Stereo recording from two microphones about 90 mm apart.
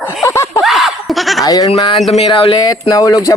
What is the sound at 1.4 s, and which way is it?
Speech, 45° left (ahead or behind).